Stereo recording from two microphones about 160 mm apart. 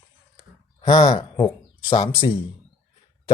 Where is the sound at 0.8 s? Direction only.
30° left (ahead or behind).